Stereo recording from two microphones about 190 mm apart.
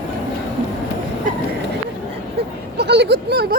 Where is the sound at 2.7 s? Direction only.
60° right (ahead or behind).